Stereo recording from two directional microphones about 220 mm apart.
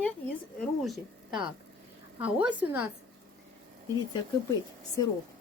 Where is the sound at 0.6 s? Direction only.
Centre (ahead or behind).